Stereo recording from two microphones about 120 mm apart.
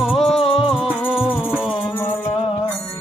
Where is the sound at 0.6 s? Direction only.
5° right (ahead or behind).